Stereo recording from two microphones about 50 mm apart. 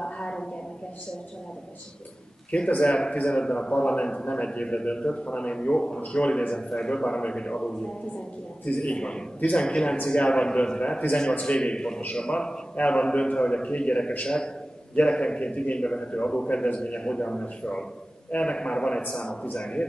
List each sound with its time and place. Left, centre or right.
0.0 s a woman's voice: centre
2.5 s a man's voice: left